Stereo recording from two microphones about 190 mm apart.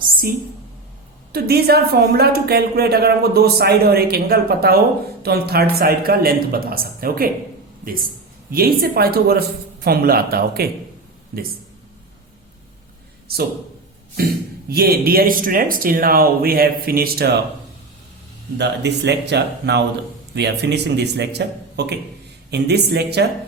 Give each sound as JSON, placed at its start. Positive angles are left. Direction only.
{"t": 1.3, "sound": "a woman's voice", "side_deg": -55}
{"t": 8.4, "sound": "speech", "side_deg": -50}
{"t": 13.3, "sound": "speech", "side_deg": -55}
{"t": 14.7, "sound": "speech", "side_deg": -55}
{"t": 18.5, "sound": "a woman's voice", "side_deg": -65}